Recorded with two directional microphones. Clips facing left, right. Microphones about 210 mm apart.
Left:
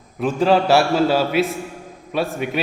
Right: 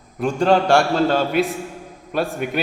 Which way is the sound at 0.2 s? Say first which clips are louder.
Even; centre (ahead or behind).